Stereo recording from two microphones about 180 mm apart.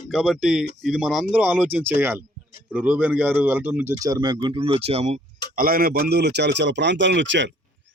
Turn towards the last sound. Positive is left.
turn(degrees=-90)